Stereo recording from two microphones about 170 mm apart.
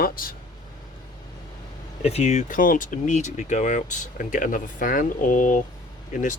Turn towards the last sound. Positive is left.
turn(degrees=50)  # may be behind; listen again after turning